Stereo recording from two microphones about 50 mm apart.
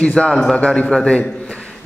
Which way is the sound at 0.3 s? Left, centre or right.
Centre.